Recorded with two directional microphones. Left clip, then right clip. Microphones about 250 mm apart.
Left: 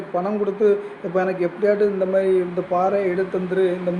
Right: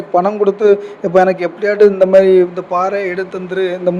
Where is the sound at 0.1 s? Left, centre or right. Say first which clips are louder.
Right 10 dB; right.